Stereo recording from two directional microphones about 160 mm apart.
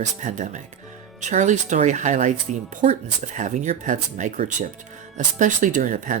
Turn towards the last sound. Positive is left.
turn(degrees=-50)  # may be behind; listen again after turning